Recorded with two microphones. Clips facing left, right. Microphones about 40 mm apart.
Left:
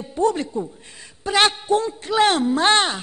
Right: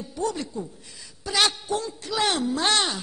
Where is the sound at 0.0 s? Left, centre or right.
Left.